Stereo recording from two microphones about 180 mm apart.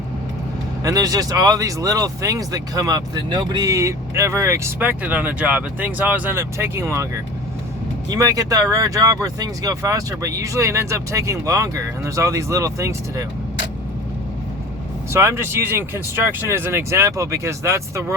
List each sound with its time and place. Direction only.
0.9 s speech: 20° right (ahead or behind)
8.1 s speech: 20° right (ahead or behind)
15.1 s speech: 15° right (ahead or behind)